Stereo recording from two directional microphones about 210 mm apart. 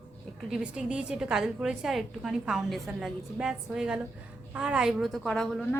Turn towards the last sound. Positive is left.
turn(degrees=5)  # may be behind; listen again after turning